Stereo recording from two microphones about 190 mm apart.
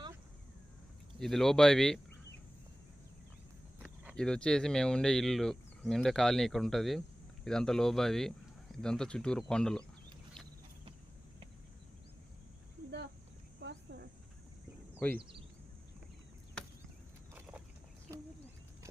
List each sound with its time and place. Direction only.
1.2 s speech: centre (ahead or behind)
4.1 s speech: 5° left (ahead or behind)
13.6 s cricket: 65° right (ahead or behind)
15.2 s speech: 25° right (ahead or behind)